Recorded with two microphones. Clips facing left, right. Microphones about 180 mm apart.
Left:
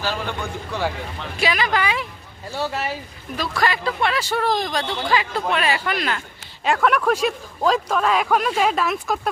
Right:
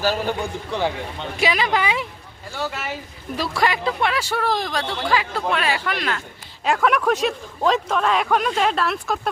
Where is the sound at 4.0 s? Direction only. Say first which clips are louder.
Left 3 dB; 10° right (ahead or behind).